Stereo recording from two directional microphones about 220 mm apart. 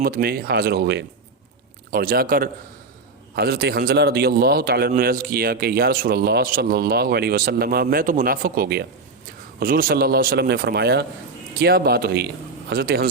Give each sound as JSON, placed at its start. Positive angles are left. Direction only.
{"t": 0.0, "sound": "a man's voice", "side_deg": -45}